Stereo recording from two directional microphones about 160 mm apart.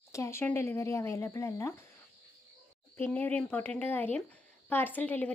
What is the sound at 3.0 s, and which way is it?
A woman's voice, 10° left (ahead or behind).